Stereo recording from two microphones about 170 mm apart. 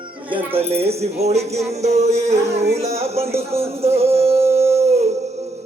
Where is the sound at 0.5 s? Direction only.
35° right (ahead or behind).